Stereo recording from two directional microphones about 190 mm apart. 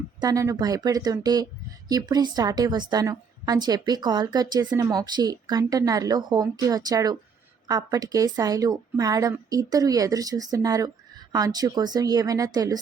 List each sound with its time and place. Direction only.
0.2 s a woman's voice: 20° right (ahead or behind)